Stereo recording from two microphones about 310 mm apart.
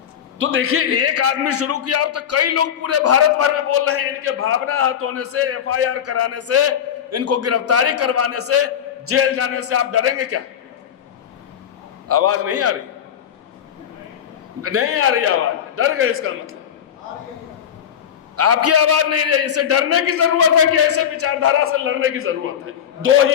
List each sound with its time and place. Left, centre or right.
0.3 s a man's voice: right
12.0 s a man's voice: right
14.6 s a man's voice: right
18.3 s a man's voice: right